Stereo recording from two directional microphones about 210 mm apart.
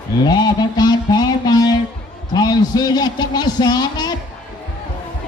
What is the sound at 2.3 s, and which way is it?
A man's voice, 20° left (ahead or behind).